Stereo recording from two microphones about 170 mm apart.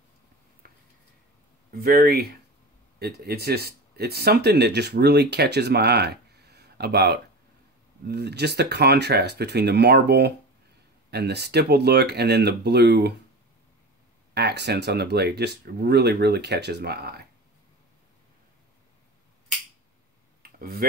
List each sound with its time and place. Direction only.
1.7 s speech: 60° right (ahead or behind)
14.3 s speech: 80° right
20.4 s a sound: 60° right (ahead or behind)